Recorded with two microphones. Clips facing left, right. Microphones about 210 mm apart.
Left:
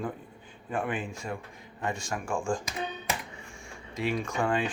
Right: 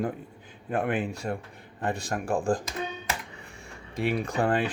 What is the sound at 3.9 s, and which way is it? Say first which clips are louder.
Speech: right 3 dB; 55° right (ahead or behind).